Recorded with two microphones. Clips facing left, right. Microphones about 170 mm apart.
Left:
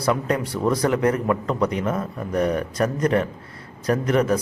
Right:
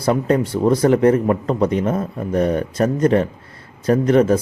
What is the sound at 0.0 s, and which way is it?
Speech, 30° right (ahead or behind).